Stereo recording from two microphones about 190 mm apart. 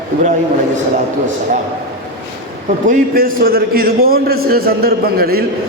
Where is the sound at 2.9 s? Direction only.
50° right (ahead or behind).